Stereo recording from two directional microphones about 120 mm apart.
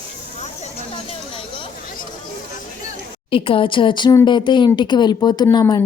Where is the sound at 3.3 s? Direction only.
50° left (ahead or behind).